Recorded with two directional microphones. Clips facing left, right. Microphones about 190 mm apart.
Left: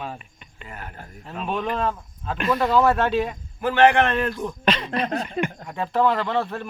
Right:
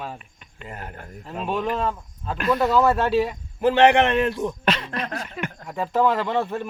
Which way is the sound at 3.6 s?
25° right (ahead or behind).